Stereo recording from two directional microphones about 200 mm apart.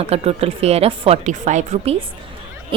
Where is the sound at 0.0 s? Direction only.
30° right (ahead or behind).